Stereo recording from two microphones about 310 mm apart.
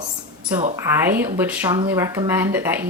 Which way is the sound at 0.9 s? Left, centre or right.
Centre.